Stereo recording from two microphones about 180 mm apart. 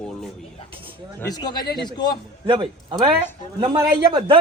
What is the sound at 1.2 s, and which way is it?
Speech, 25° left (ahead or behind).